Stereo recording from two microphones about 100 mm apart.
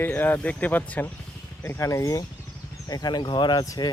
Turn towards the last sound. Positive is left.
turn(degrees=50)  # may be behind; listen again after turning